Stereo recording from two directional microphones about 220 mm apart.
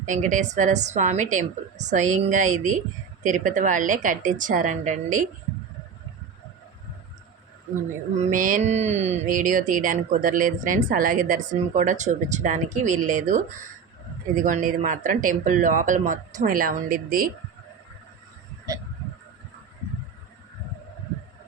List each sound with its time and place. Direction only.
0.0 s speech: 35° right (ahead or behind)
8.1 s speech: 35° right (ahead or behind)